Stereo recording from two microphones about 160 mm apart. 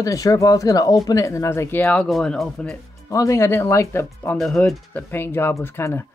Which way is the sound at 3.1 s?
20° left (ahead or behind).